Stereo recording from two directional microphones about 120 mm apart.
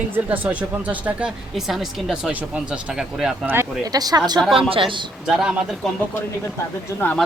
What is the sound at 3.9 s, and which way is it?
Speech, 30° right (ahead or behind).